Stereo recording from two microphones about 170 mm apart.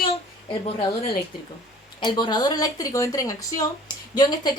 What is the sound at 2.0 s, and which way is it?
A woman's voice, 25° left (ahead or behind).